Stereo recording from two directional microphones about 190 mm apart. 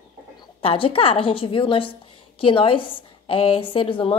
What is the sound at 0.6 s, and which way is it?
A woman's voice, 30° left (ahead or behind).